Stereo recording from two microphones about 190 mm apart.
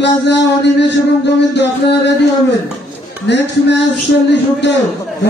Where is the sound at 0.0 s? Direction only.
65° left (ahead or behind).